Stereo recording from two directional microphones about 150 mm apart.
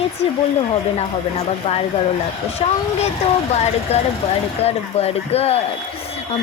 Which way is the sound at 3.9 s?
45° left (ahead or behind).